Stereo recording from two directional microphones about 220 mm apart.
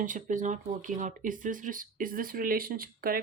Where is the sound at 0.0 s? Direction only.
35° right (ahead or behind).